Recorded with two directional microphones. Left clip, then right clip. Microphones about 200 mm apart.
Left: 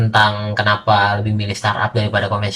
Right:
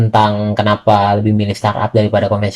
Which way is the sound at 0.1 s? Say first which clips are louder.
Right 1 dB; 40° right (ahead or behind).